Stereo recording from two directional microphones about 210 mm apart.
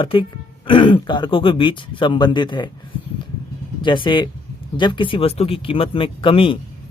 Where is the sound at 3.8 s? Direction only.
20° left (ahead or behind).